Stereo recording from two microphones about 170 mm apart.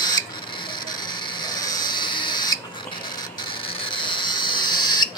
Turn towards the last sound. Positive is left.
turn(degrees=25)  # may be behind; listen again after turning